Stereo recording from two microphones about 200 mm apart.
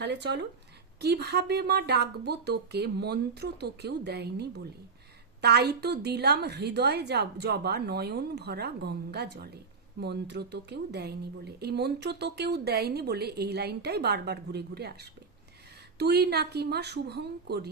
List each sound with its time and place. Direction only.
0.0 s a woman's voice: 60° right (ahead or behind)
16.0 s speech: 55° right (ahead or behind)